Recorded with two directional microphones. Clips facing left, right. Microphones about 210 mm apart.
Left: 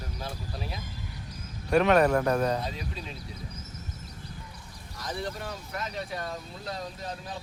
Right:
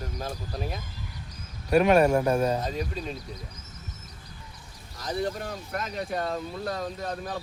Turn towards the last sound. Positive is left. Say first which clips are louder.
# right 5 dB
turn(degrees=-55)  # may be behind; listen again after turning